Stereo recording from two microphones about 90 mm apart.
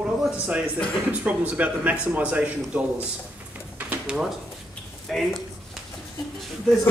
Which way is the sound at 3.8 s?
15° right (ahead or behind).